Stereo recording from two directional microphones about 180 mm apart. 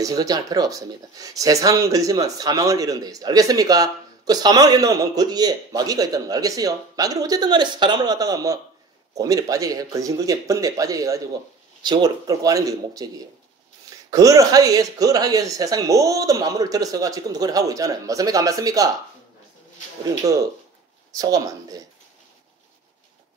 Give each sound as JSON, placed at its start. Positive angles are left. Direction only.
{"t": 0.0, "sound": "speech", "side_deg": -20}
{"t": 21.1, "sound": "speech", "side_deg": -20}